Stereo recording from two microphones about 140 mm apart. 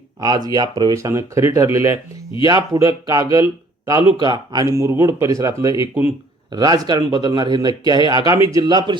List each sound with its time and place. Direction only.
0.2 s speech: 30° right (ahead or behind)